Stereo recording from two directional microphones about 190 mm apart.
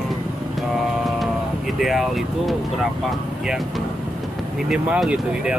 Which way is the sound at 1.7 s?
Centre (ahead or behind).